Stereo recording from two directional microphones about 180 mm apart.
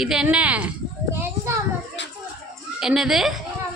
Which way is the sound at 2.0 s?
80° left.